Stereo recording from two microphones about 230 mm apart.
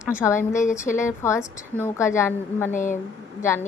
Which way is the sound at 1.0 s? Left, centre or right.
Centre.